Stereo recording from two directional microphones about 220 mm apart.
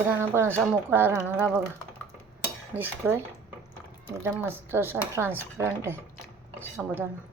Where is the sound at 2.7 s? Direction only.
10° right (ahead or behind).